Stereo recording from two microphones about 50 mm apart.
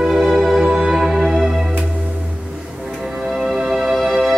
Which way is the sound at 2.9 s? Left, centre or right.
Centre.